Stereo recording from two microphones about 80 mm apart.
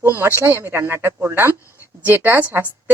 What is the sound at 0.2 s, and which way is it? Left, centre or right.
Speech, right.